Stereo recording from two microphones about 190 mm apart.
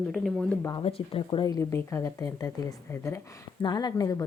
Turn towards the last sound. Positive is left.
turn(degrees=20)  # may be behind; listen again after turning